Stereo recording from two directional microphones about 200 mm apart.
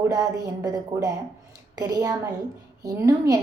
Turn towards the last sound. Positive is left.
turn(degrees=-15)  # may be behind; listen again after turning